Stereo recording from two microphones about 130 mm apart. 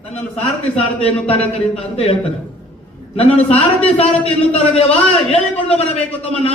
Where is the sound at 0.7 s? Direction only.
55° left (ahead or behind).